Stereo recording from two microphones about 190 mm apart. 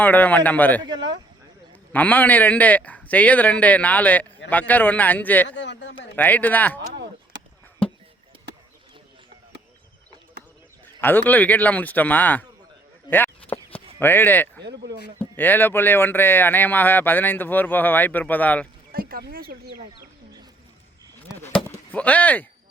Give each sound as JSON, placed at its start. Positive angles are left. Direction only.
{"t": 0.0, "sound": "speech", "side_deg": 10}
{"t": 1.9, "sound": "speech", "side_deg": 10}
{"t": 5.5, "sound": "speech", "side_deg": 70}
{"t": 6.1, "sound": "speech", "side_deg": 10}
{"t": 10.8, "sound": "speech", "side_deg": 10}
{"t": 13.1, "sound": "a sound", "side_deg": 10}
{"t": 14.0, "sound": "speech", "side_deg": 10}
{"t": 14.6, "sound": "speech", "side_deg": -65}
{"t": 15.2, "sound": "speech", "side_deg": 10}
{"t": 18.9, "sound": "speech", "side_deg": -50}
{"t": 21.4, "sound": "speech", "side_deg": 5}